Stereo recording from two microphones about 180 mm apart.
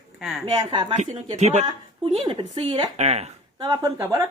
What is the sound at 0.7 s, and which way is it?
Speech, 30° right (ahead or behind).